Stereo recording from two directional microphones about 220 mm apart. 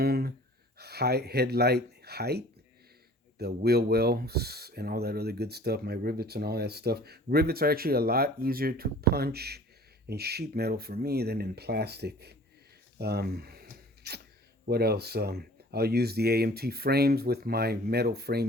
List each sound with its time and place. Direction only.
0.0 s gasp: 45° right (ahead or behind)
0.8 s speech: 45° right (ahead or behind)
13.0 s a sound: 45° right (ahead or behind)
14.7 s speech: 45° right (ahead or behind)